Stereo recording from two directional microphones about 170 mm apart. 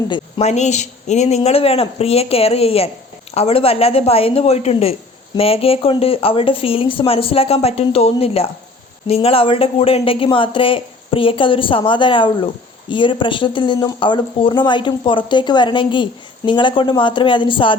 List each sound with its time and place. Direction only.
0.1 s speech: 40° left (ahead or behind)